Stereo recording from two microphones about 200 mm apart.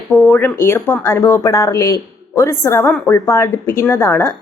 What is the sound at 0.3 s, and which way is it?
A woman's voice, 10° left (ahead or behind).